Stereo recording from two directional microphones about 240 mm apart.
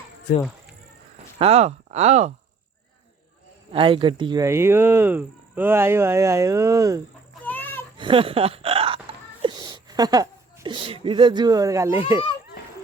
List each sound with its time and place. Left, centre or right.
0.3 s speech: left
1.4 s speech: right
3.7 s speech: right
7.4 s a sound: centre
7.9 s a woman's voice: right